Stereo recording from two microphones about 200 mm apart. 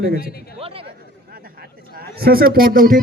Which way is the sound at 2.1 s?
50° right (ahead or behind).